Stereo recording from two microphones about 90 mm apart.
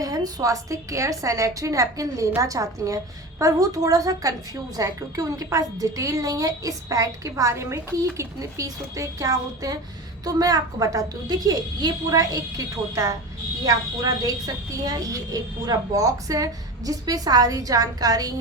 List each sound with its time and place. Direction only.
0.0 s a woman's voice: 45° right (ahead or behind)